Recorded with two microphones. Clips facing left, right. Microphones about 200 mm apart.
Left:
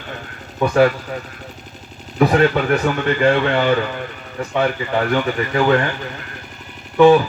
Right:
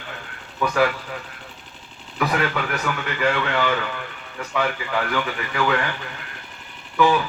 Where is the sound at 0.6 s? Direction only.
35° left (ahead or behind).